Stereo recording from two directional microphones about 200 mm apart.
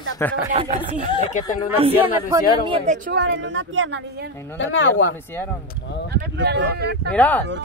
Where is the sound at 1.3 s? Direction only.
40° left (ahead or behind).